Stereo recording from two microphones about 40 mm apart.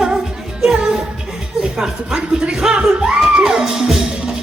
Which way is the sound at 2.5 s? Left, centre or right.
Centre.